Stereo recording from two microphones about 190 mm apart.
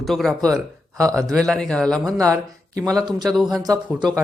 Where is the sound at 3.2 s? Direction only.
Centre (ahead or behind).